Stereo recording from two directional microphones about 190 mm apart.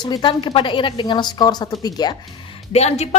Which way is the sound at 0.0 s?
25° left (ahead or behind).